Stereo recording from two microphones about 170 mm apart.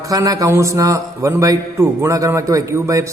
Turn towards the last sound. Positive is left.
turn(degrees=-15)  # may be behind; listen again after turning